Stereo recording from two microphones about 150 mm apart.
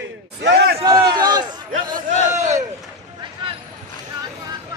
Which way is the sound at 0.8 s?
25° right (ahead or behind).